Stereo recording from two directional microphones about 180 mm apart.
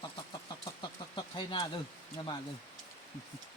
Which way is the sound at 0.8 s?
25° left (ahead or behind).